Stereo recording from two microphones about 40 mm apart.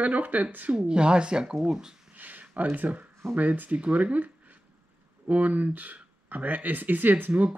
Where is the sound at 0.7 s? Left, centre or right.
Right.